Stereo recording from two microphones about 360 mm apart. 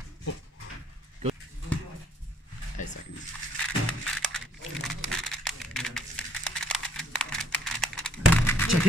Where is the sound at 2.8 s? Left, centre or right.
Left.